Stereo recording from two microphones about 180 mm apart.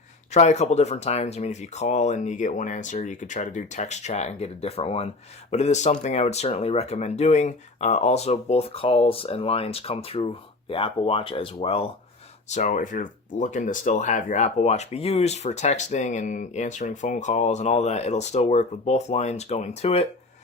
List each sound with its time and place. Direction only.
0.3 s speech: 40° left (ahead or behind)
12.5 s speech: 45° left (ahead or behind)